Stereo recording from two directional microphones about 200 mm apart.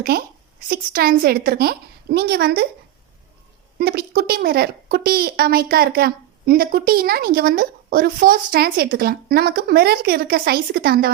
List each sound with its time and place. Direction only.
0.1 s a woman's voice: 50° right (ahead or behind)
3.8 s a woman's voice: 50° right (ahead or behind)